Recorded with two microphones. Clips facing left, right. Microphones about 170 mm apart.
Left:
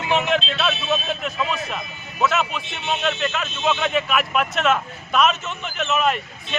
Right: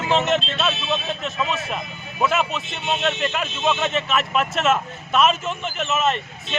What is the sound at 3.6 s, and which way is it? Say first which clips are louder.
A man's voice: left 1 dB; 5° right (ahead or behind).